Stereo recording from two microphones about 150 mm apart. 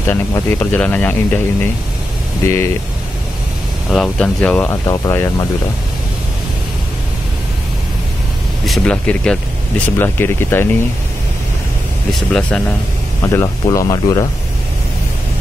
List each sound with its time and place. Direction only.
0.0 s speech: 15° left (ahead or behind)
3.9 s speech: 5° left (ahead or behind)
4.6 s speech: 25° left (ahead or behind)
8.6 s speech: centre (ahead or behind)
12.1 s speech: 5° left (ahead or behind)
13.7 s speech: 25° left (ahead or behind)